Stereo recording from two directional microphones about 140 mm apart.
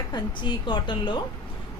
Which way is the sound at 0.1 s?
35° left (ahead or behind).